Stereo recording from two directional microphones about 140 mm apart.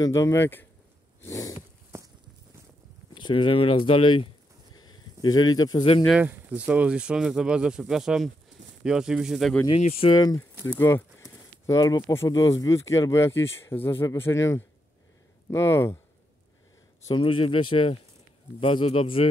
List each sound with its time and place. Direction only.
0.0 s speech: 20° left (ahead or behind)
1.2 s a sound: 25° left (ahead or behind)
3.2 s speech: 35° left (ahead or behind)
4.7 s a sound: 30° left (ahead or behind)
6.1 s speech: 10° right (ahead or behind)
9.8 s speech: 45° left (ahead or behind)
10.1 s speech: 30° left (ahead or behind)
17.1 s speech: 35° left (ahead or behind)